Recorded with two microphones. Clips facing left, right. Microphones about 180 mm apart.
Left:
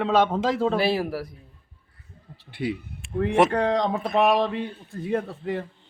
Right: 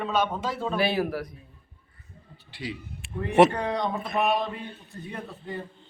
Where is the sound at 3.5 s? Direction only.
90° left.